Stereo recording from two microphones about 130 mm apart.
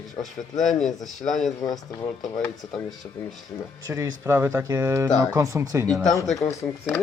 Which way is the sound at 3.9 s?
20° right (ahead or behind).